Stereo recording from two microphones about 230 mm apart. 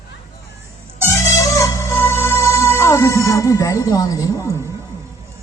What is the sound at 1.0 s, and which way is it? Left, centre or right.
Music, centre.